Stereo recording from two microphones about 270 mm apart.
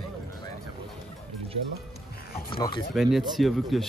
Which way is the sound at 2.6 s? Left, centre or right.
Centre.